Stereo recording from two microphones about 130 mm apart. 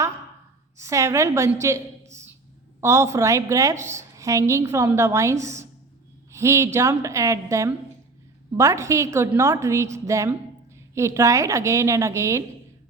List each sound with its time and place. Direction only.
0.8 s a woman's voice: 25° right (ahead or behind)